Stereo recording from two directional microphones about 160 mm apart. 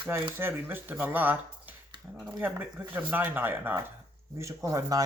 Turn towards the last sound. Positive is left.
turn(degrees=-20)  # may be behind; listen again after turning